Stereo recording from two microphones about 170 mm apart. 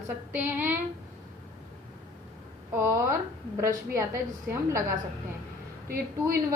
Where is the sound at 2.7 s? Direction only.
15° right (ahead or behind).